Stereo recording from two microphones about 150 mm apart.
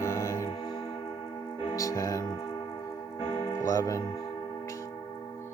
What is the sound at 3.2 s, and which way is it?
Music, 35° left (ahead or behind).